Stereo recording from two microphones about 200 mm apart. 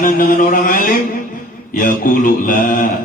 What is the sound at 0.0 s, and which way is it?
Mantra, 40° left (ahead or behind).